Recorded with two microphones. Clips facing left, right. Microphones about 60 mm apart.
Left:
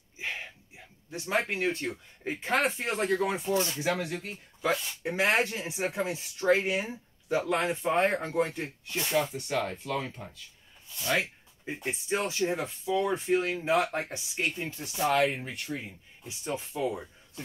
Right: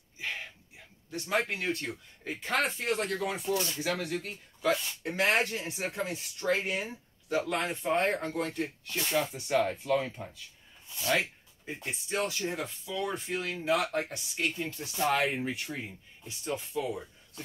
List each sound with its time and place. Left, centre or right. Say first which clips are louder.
1.1 s speech: left 1 dB; centre
3.7 s speech: left 2 dB; centre
9.2 s speech: right 2 dB; centre
11.6 s speech: left 4 dB; centre
15.0 s speech: left 2 dB; centre
16.4 s speech: left 2 dB; left